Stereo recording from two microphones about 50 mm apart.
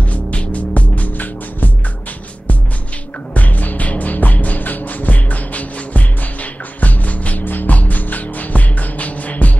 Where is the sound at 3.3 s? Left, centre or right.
Left.